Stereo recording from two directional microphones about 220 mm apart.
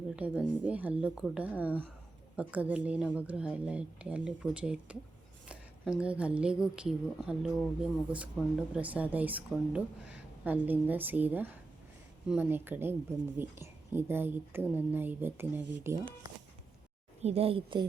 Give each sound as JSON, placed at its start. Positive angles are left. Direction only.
{"t": 0.2, "sound": "a woman's voice", "side_deg": -5}
{"t": 17.2, "sound": "a woman's voice", "side_deg": -25}